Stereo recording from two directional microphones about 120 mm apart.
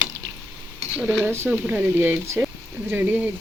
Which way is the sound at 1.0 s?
10° right (ahead or behind).